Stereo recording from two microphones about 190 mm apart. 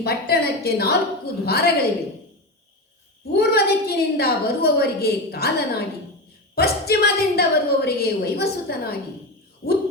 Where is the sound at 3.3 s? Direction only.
55° left (ahead or behind).